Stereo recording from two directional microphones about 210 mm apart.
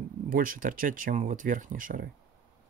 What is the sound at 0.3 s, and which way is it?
Speech, 40° right (ahead or behind).